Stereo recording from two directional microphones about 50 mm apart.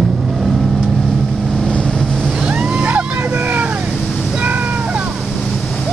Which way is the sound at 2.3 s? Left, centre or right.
Right.